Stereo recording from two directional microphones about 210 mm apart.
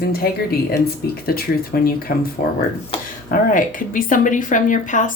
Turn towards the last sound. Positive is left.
turn(degrees=35)  # may be behind; listen again after turning